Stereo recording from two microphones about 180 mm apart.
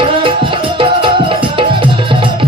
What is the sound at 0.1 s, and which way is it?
Music, 30° right (ahead or behind).